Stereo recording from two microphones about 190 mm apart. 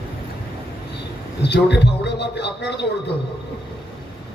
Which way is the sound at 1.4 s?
65° left (ahead or behind).